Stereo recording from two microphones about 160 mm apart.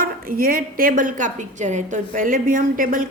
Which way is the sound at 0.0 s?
65° right (ahead or behind).